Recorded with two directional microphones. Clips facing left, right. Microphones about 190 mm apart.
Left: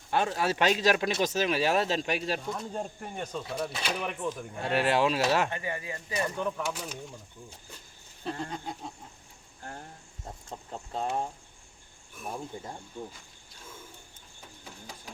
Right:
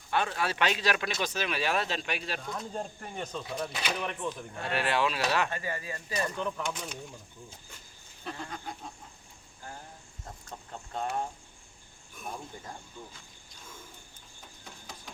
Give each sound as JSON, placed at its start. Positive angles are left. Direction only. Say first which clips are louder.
{"t": 0.1, "sound": "speech", "louder": "left 3 dB", "side_deg": 40}
{"t": 2.4, "sound": "speech", "louder": "left 2 dB", "side_deg": 5}
{"t": 4.7, "sound": "speech", "louder": "left 4 dB", "side_deg": 40}
{"t": 5.5, "sound": "speech", "louder": "left 1 dB", "side_deg": 20}
{"t": 6.2, "sound": "speech", "louder": "left 3 dB", "side_deg": 5}
{"t": 8.2, "sound": "goat", "louder": "left 4 dB", "side_deg": 30}
{"t": 10.5, "sound": "goat", "louder": "left 2 dB", "side_deg": 30}
{"t": 12.5, "sound": "goat", "louder": "left 5 dB", "side_deg": 20}
{"t": 13.0, "sound": "speech", "louder": "left 7 dB", "side_deg": 15}
{"t": 14.6, "sound": "a sound", "louder": "left 2 dB", "side_deg": 5}